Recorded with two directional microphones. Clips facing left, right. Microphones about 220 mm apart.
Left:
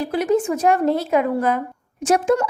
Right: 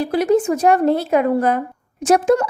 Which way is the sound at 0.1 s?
35° right (ahead or behind).